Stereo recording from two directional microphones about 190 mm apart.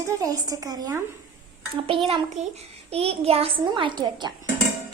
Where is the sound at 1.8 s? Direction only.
30° right (ahead or behind).